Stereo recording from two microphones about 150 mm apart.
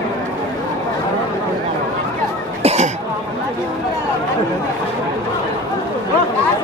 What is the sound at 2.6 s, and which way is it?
Cough, 45° right (ahead or behind).